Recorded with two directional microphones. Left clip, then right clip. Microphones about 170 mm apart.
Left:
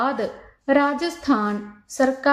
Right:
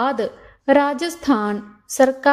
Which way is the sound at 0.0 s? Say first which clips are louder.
Right 2 dB; 50° right (ahead or behind).